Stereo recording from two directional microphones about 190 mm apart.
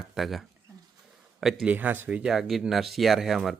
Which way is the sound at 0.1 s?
Centre (ahead or behind).